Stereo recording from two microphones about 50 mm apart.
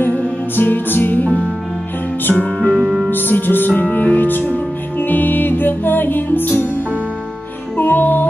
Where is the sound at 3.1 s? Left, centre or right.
Left.